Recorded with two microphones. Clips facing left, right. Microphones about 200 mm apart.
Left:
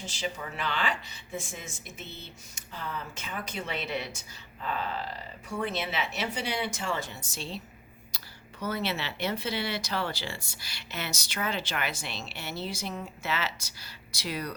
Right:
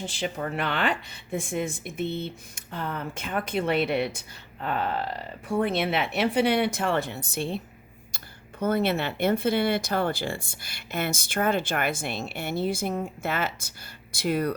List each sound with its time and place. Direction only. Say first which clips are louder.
0.0 s a woman's voice: right 5 dB; 55° right (ahead or behind)